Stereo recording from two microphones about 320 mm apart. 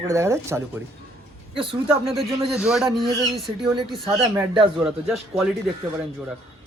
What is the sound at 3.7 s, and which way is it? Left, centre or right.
Speech, centre.